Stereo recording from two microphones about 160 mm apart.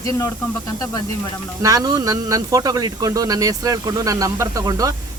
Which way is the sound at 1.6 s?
25° right (ahead or behind).